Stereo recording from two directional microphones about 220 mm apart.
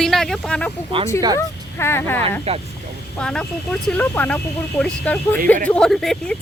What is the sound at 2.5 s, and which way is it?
Speech, 25° right (ahead or behind).